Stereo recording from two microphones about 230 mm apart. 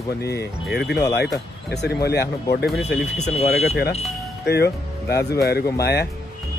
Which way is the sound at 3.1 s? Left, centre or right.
Left.